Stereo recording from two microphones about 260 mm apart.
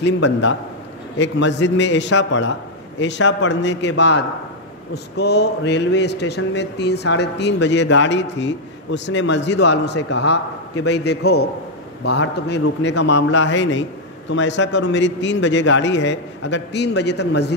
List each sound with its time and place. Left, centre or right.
0.0 s a man's voice: left